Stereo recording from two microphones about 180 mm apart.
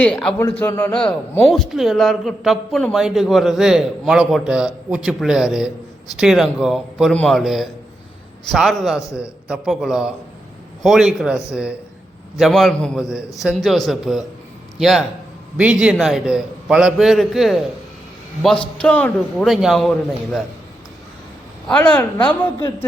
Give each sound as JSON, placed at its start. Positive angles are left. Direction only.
{"t": 0.0, "sound": "a woman's voice", "side_deg": 5}
{"t": 0.9, "sound": "a man's voice", "side_deg": 5}
{"t": 18.8, "sound": "a man's voice", "side_deg": 5}
{"t": 21.7, "sound": "a woman's voice", "side_deg": 10}